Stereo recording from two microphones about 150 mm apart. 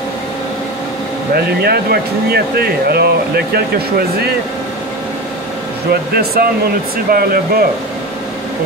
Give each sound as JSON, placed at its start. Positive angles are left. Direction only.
{"t": 1.3, "sound": "speech", "side_deg": -90}
{"t": 5.9, "sound": "speech", "side_deg": -90}